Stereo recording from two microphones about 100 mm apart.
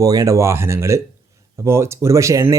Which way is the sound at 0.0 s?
35° right (ahead or behind).